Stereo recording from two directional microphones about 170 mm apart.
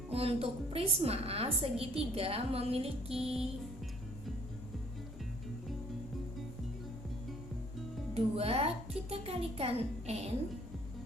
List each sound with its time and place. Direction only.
0.1 s a woman's voice: 35° right (ahead or behind)
8.1 s a woman's voice: 35° right (ahead or behind)